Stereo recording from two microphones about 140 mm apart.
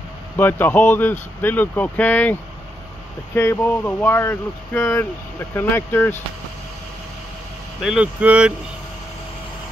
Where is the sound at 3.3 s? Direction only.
20° left (ahead or behind).